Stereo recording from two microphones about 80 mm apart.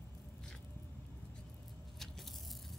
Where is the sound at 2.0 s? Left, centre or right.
Centre.